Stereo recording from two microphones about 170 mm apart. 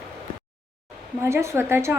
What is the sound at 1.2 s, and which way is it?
Speech, 15° right (ahead or behind).